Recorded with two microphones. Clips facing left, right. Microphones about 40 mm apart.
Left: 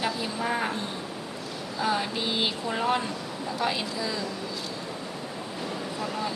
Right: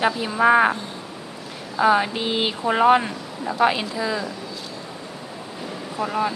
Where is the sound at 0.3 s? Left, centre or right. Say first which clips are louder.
Right 17 dB; right.